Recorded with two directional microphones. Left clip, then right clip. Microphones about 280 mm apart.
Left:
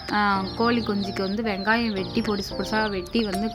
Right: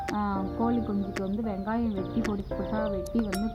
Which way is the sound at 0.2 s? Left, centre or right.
Left.